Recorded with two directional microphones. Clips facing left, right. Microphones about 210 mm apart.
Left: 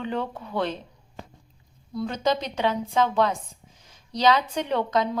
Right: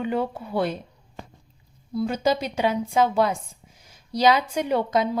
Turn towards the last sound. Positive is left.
turn(degrees=-10)  # may be behind; listen again after turning